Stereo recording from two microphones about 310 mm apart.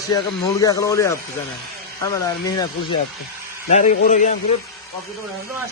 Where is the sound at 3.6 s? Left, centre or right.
Left.